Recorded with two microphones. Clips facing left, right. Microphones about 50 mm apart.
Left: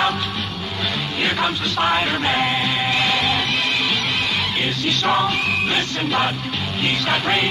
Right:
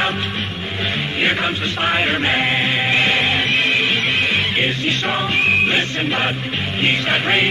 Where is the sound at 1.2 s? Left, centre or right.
Right.